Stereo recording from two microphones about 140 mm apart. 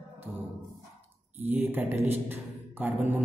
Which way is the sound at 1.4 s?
15° right (ahead or behind).